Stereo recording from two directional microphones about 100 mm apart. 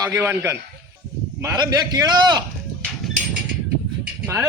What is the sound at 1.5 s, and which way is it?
Speech, 45° right (ahead or behind).